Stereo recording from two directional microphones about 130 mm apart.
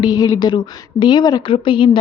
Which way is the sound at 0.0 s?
30° left (ahead or behind).